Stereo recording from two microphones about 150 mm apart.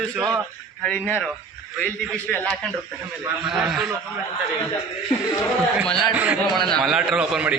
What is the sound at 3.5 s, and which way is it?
Speech, 5° right (ahead or behind).